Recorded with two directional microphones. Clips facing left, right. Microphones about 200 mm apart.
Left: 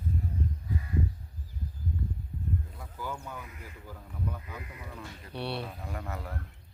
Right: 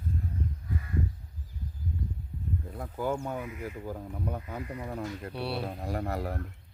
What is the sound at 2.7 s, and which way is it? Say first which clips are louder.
Speech: right 8 dB; 55° right (ahead or behind).